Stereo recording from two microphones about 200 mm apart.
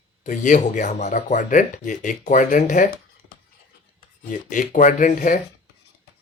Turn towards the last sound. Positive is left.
turn(degrees=40)  # may be behind; listen again after turning